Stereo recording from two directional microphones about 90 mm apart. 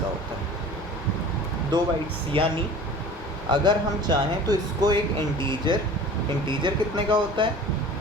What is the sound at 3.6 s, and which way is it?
A man's voice, 50° right (ahead or behind).